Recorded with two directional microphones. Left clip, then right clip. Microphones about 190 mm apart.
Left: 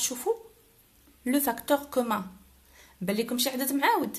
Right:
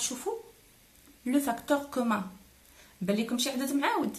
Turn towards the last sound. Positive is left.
turn(degrees=45)  # may be behind; listen again after turning